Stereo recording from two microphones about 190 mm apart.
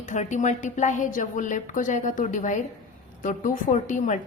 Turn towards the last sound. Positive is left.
turn(degrees=40)  # may be behind; listen again after turning